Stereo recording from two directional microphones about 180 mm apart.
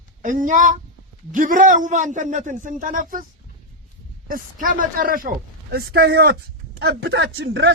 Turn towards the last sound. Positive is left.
turn(degrees=-75)  # may be behind; listen again after turning